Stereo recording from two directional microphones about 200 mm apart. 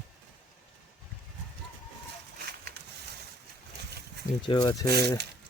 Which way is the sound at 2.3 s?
50° right (ahead or behind).